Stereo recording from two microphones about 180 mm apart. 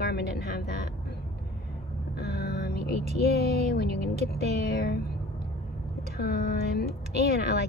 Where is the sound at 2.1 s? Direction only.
65° left (ahead or behind).